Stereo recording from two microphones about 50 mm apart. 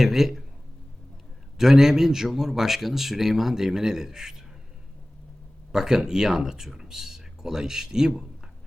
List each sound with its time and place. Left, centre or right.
0.0 s a man's voice: centre
1.5 s a man's voice: centre
5.7 s a man's voice: centre